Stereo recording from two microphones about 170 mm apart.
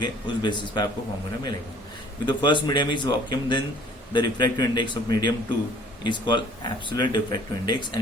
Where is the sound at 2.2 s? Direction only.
25° left (ahead or behind).